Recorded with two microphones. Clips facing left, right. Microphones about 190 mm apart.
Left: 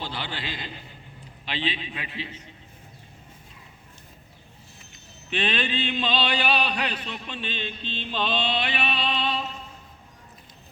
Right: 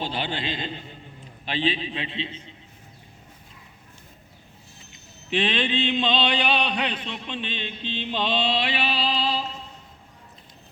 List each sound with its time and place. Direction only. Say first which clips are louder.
0.0 s a man's voice: right 5 dB; 20° right (ahead or behind)
1.5 s music: right 5 dB; 40° right (ahead or behind); by 2.5 s 25° right (ahead or behind)
5.3 s music: right 3 dB; 20° right (ahead or behind)